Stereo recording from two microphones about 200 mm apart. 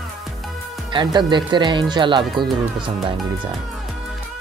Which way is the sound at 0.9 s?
25° right (ahead or behind).